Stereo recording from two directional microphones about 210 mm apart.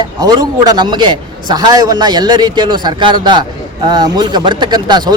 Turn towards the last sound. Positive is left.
turn(degrees=-20)  # may be behind; listen again after turning